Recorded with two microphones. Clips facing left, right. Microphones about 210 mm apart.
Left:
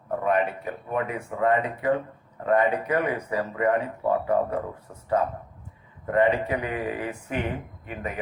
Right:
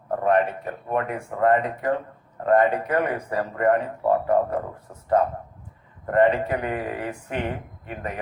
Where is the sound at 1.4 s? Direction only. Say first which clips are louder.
Right 3 dB; 45° right (ahead or behind).